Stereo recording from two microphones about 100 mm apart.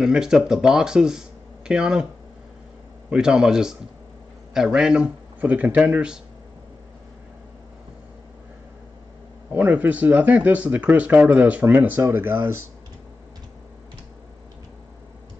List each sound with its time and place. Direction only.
0.0 s speech: 5° right (ahead or behind)
3.1 s speech: 10° right (ahead or behind)
9.5 s speech: 15° right (ahead or behind)